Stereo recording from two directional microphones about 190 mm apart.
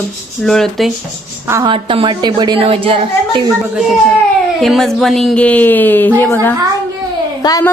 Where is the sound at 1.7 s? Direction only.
25° right (ahead or behind).